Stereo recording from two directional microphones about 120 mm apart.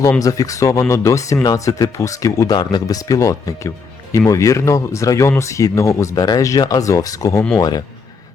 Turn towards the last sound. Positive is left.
turn(degrees=35)  # may be behind; listen again after turning